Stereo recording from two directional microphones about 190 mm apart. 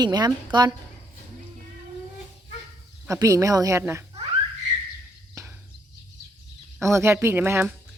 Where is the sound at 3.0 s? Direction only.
15° right (ahead or behind).